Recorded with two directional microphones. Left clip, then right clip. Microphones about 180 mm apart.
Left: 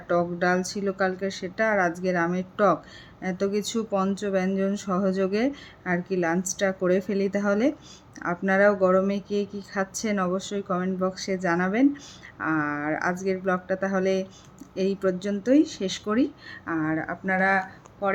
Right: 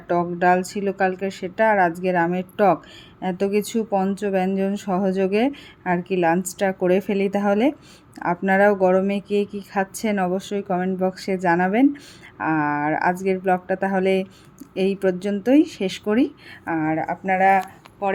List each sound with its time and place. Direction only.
0.2 s speech: 10° right (ahead or behind)